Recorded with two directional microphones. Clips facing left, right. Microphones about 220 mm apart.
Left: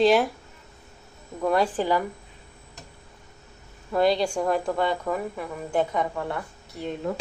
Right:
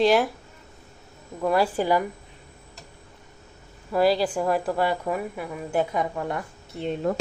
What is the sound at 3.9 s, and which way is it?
A woman's voice, 5° right (ahead or behind).